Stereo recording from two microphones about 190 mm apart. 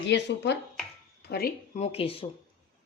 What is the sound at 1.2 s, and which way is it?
Speech, 55° left (ahead or behind).